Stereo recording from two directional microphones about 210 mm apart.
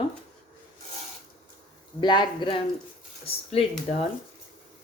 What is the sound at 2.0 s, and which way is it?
Speech, 20° left (ahead or behind).